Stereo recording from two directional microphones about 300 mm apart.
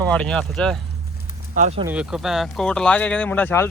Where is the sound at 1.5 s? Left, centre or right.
Right.